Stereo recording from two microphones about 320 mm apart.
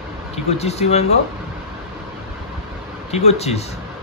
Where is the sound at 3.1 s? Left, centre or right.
Centre.